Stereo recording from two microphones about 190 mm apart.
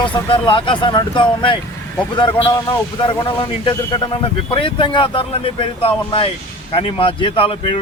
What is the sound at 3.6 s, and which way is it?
Speech, 20° left (ahead or behind).